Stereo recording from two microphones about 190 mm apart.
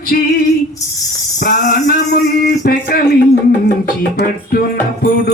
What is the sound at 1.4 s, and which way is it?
Speech, 50° left (ahead or behind).